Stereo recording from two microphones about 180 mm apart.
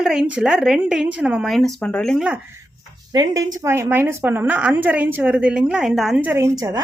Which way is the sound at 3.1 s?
20° right (ahead or behind).